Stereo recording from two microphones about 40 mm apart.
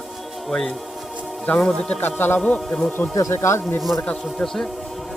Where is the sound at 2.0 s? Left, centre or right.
Left.